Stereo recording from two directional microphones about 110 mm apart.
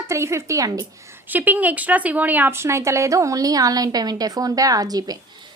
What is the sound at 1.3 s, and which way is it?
A woman's voice, 15° right (ahead or behind).